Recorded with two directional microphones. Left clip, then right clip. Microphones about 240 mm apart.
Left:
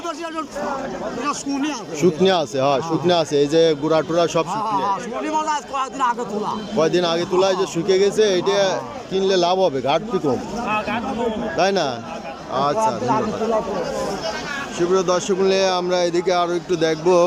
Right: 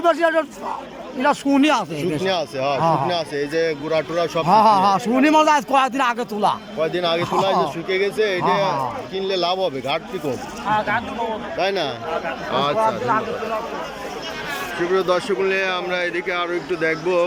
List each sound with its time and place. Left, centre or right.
0.0 s speech: right
2.0 s speech: centre
4.4 s a man's voice: right
6.7 s speech: centre
14.9 s speech: centre